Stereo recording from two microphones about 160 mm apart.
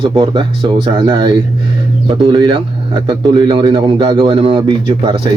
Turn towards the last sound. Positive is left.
turn(degrees=-35)  # may be behind; listen again after turning